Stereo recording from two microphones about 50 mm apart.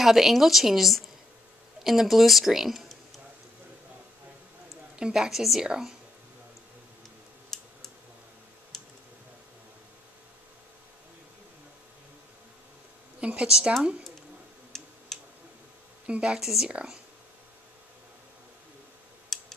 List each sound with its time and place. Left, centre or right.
0.0 s speech: centre
4.9 s a woman's voice: centre
7.5 s a sound: centre
8.7 s clicking: centre
13.2 s a woman's voice: right
13.5 s a woman's voice: centre
14.7 s tick-tock: centre
15.1 s tick: centre
16.1 s speech: right
16.3 s a woman's voice: centre
19.3 s tick-tock: centre